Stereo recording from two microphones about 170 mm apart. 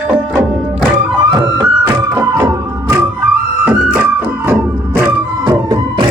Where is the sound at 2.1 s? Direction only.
15° right (ahead or behind).